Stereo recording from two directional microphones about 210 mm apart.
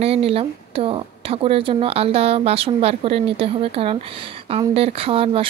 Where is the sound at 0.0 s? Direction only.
30° right (ahead or behind).